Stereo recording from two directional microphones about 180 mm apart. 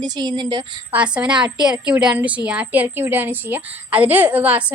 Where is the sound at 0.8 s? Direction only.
5° right (ahead or behind).